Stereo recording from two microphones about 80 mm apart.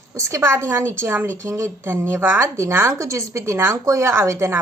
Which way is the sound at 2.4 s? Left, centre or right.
Right.